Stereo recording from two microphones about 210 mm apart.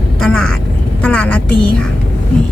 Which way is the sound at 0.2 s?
5° left (ahead or behind).